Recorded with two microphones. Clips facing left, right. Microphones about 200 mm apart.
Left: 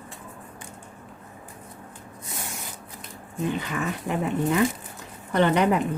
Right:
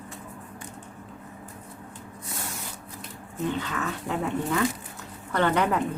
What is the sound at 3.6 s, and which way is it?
Speech, 15° left (ahead or behind).